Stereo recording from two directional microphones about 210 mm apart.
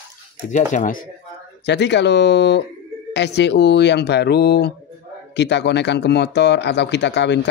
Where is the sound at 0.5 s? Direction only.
35° left (ahead or behind).